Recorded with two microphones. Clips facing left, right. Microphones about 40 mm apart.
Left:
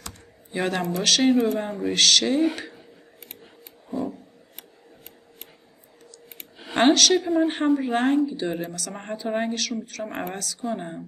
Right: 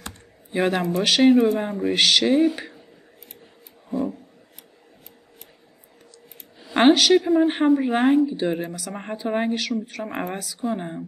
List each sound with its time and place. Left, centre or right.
0.5 s a man's voice: centre
6.7 s a sound: centre
7.2 s a woman's voice: centre